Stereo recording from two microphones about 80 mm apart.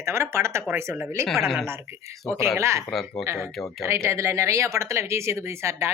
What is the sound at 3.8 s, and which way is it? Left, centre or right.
Speech, right.